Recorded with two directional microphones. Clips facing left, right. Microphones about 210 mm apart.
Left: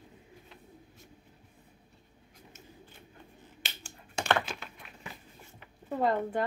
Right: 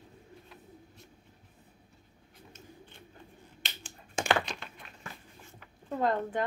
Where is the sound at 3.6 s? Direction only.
Centre (ahead or behind).